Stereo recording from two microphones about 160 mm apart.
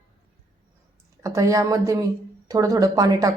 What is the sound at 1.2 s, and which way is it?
A woman's voice, 20° right (ahead or behind).